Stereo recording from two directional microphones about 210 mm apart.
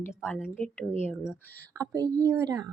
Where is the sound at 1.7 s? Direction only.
15° right (ahead or behind).